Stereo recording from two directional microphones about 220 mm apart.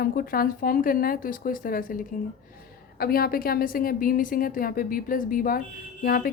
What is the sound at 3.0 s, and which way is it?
A woman's voice, 45° left (ahead or behind).